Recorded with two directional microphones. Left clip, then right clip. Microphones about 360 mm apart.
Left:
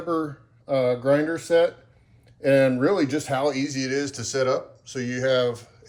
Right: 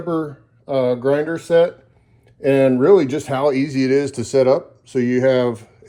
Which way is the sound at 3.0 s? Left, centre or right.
Centre.